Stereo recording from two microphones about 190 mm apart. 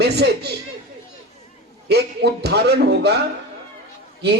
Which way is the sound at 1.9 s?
60° right (ahead or behind).